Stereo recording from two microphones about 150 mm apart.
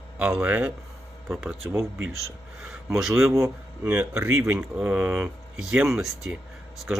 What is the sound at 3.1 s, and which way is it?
Speech, 20° right (ahead or behind).